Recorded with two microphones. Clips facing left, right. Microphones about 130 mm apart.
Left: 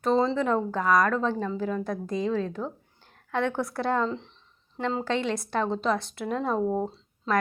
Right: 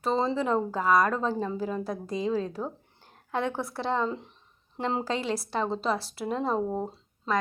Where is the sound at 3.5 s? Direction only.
Centre (ahead or behind).